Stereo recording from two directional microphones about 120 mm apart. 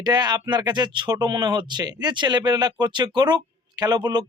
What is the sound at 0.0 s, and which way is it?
Speech, 35° right (ahead or behind).